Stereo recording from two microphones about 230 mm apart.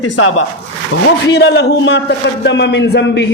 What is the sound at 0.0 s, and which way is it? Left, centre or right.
Speech, left.